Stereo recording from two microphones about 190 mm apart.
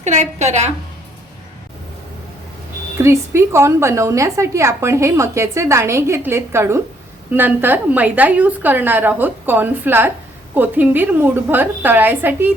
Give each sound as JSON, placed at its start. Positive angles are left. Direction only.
{"t": 0.0, "sound": "a woman's voice", "side_deg": -40}
{"t": 3.0, "sound": "a woman's voice", "side_deg": -15}